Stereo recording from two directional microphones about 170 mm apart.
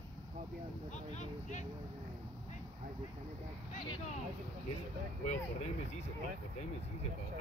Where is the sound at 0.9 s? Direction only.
45° left (ahead or behind).